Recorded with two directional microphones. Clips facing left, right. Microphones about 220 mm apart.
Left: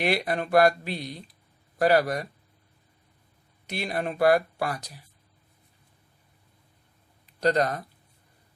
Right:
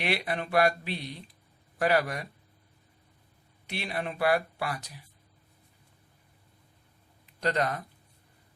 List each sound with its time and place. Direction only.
0.0 s speech: 45° left (ahead or behind)
3.7 s speech: 45° left (ahead or behind)
7.3 s speech: 40° left (ahead or behind)